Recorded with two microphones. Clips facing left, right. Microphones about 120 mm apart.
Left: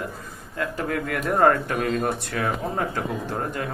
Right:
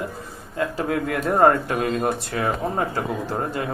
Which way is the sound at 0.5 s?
20° right (ahead or behind).